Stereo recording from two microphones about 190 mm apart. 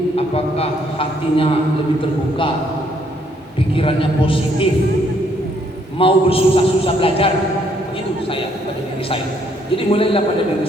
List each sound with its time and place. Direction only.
0.2 s a man's voice: 30° left (ahead or behind)
3.8 s a man's voice: 30° left (ahead or behind)
6.0 s a man's voice: 30° left (ahead or behind)
9.7 s a man's voice: 30° left (ahead or behind)